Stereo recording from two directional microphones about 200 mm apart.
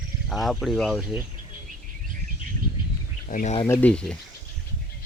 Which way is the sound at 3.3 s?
40° left (ahead or behind).